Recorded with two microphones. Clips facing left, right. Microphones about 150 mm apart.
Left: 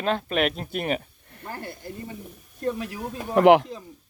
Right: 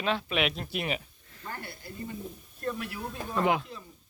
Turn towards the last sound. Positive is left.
turn(degrees=75)  # may be behind; listen again after turning